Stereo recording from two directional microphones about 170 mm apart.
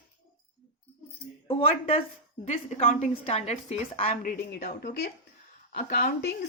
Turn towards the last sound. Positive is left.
turn(degrees=70)  # may be behind; listen again after turning